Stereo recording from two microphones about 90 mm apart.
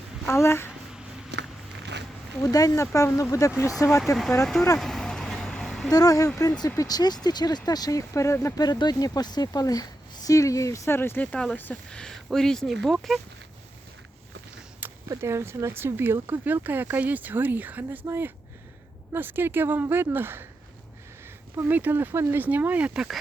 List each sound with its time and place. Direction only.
0.3 s speech: 30° left (ahead or behind)
2.4 s speech: 45° left (ahead or behind)
3.8 s speech: centre (ahead or behind)
4.8 s vehicle: 5° left (ahead or behind)
5.9 s speech: 45° left (ahead or behind)
8.5 s speech: 45° left (ahead or behind); by 11.8 s 20° left (ahead or behind)
11.9 s speech: 10° left (ahead or behind)
14.8 s a sound: 20° right (ahead or behind)
15.2 s speech: 30° right (ahead or behind)
21.6 s speech: 20° right (ahead or behind)